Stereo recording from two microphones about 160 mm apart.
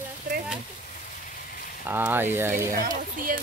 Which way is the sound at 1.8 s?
10° right (ahead or behind).